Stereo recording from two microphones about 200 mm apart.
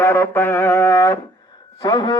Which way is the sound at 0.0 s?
10° left (ahead or behind).